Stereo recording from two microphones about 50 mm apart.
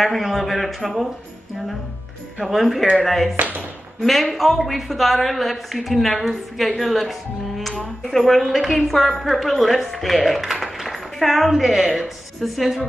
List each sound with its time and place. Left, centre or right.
0.0 s a woman's voice: centre
2.3 s a woman's voice: centre
3.3 s speech: right
4.0 s a woman's voice: centre